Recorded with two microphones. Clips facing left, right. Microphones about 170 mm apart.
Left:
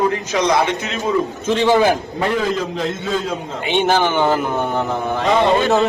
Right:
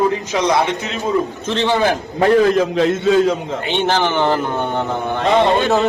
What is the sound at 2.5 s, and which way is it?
Speech, 75° right (ahead or behind).